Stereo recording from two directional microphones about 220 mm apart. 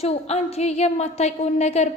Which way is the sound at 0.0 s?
30° left (ahead or behind).